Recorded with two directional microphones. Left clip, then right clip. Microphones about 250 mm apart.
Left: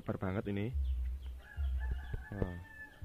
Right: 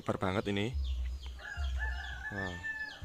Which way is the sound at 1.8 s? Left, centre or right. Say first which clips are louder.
Right 14 dB; right.